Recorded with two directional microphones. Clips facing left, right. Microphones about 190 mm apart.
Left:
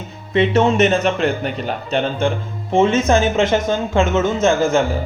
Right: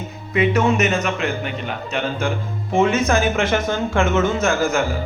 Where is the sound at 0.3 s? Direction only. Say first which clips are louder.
Left 3 dB; 30° left (ahead or behind).